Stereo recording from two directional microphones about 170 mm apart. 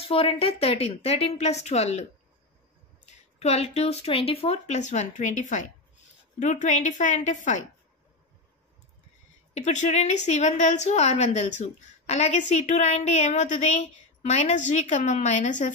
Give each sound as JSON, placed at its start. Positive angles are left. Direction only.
{"t": 0.1, "sound": "speech", "side_deg": 35}
{"t": 3.1, "sound": "a woman's voice", "side_deg": 40}
{"t": 9.5, "sound": "a woman's voice", "side_deg": 40}